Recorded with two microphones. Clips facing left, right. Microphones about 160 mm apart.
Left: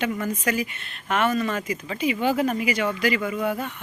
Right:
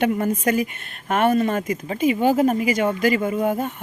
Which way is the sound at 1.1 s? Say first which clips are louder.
Right 4 dB; 50° right (ahead or behind).